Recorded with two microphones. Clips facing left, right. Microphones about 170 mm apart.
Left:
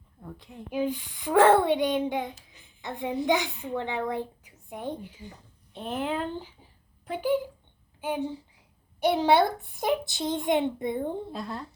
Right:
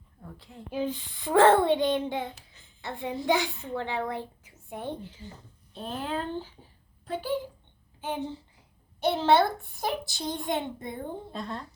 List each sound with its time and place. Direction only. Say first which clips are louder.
0.3 s a woman's voice: left 2 dB; 15° left (ahead or behind)
11.3 s speech: left 1 dB; centre (ahead or behind)